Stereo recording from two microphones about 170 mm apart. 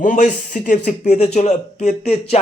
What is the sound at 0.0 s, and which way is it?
Speech, 50° left (ahead or behind).